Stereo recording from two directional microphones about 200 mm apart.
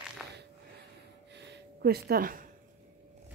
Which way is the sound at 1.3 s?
60° right (ahead or behind).